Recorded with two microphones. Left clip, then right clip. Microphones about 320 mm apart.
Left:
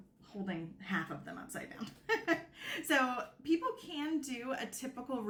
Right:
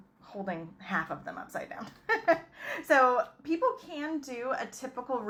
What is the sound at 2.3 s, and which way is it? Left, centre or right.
A woman's voice, centre.